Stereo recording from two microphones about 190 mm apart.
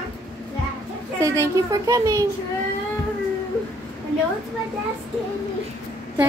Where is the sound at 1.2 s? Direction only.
15° right (ahead or behind).